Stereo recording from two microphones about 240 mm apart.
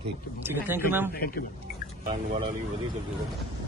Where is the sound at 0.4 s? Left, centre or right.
Centre.